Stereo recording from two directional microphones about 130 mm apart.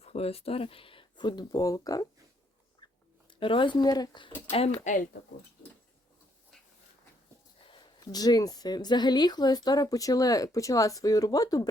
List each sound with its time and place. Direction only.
0.0 s speech: 50° left (ahead or behind); by 2.0 s 25° left (ahead or behind)
3.4 s speech: 40° left (ahead or behind)
4.8 s speech: 75° left (ahead or behind)
7.6 s speech: 40° left (ahead or behind)